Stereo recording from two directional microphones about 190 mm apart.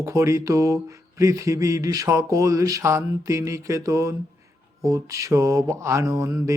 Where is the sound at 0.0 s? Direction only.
15° right (ahead or behind).